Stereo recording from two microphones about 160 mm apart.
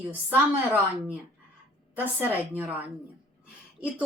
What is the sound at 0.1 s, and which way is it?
A woman's voice, 10° right (ahead or behind).